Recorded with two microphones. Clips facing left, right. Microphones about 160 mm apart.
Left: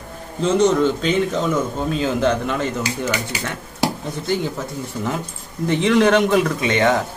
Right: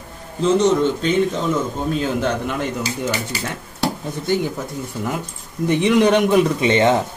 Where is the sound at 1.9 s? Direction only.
Centre (ahead or behind).